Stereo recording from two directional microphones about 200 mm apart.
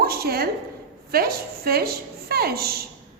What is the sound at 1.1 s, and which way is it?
A woman's voice, 50° right (ahead or behind).